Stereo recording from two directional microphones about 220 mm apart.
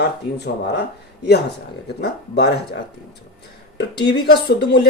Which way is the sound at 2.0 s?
45° left (ahead or behind).